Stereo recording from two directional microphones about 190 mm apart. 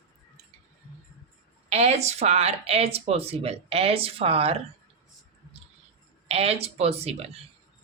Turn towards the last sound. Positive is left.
turn(degrees=-35)  # may be behind; listen again after turning